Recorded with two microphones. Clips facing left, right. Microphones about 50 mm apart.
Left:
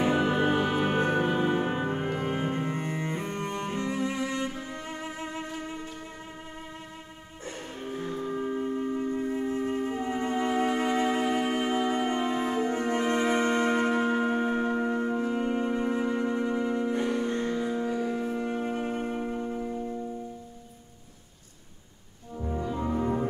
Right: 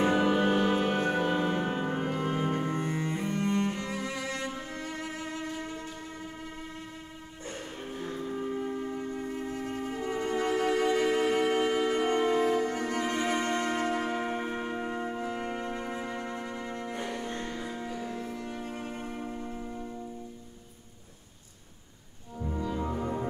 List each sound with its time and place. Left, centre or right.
0.2 s music: centre
3.3 s cello: left
9.1 s music: centre
14.3 s music: centre
15.0 s music: centre
15.2 s music: centre
15.6 s music: centre
22.5 s music: centre